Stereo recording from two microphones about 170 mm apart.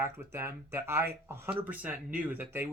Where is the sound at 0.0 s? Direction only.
15° right (ahead or behind).